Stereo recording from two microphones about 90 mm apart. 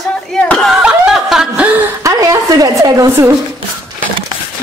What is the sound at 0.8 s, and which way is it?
Snicker, 10° right (ahead or behind).